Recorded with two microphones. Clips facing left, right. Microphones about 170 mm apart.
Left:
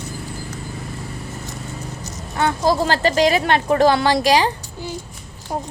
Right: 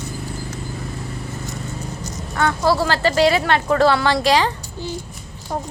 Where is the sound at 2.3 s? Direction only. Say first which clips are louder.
Even; 25° left (ahead or behind).